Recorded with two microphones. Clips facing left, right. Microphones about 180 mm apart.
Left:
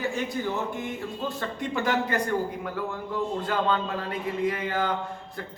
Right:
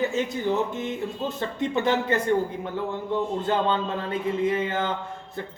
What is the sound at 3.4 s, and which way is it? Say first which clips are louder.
A man's voice: right 2 dB; 25° right (ahead or behind).